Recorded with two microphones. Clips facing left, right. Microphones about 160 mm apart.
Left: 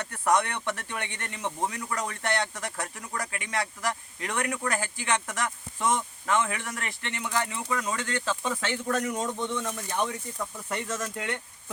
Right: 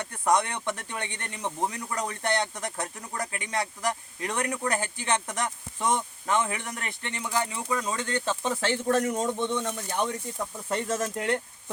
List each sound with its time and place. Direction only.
0.0 s speech: 15° right (ahead or behind)
10.7 s speech: 35° right (ahead or behind)